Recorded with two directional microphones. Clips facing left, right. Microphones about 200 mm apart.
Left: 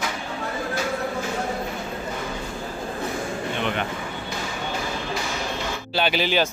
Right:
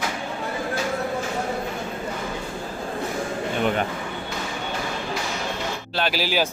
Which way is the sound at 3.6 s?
40° right (ahead or behind).